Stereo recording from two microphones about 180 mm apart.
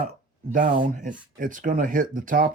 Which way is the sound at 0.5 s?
50° right (ahead or behind).